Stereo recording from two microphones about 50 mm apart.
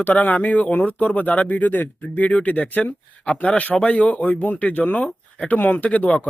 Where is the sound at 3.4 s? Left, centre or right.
Left.